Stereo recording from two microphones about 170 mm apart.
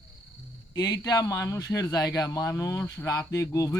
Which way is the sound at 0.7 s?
25° left (ahead or behind).